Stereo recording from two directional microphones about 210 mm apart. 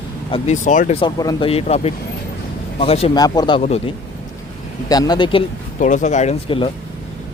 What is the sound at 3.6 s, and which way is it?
Speech, 30° left (ahead or behind).